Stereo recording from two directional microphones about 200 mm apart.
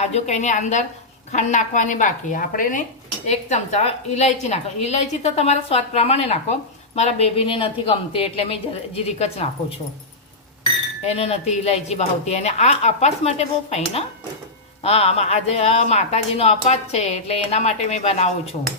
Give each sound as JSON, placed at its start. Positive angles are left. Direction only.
{"t": 0.0, "sound": "a woman's voice", "side_deg": 35}
{"t": 11.0, "sound": "a woman's voice", "side_deg": 30}